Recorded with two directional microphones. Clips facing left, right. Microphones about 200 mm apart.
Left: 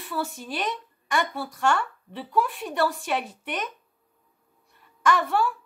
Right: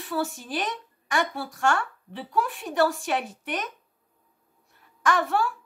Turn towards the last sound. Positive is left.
turn(degrees=0)  # may be behind; listen again after turning